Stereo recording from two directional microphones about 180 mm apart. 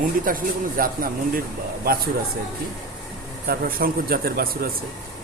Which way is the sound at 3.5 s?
55° right (ahead or behind).